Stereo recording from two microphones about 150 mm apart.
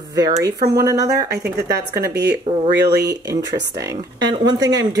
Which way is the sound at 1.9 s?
90° right.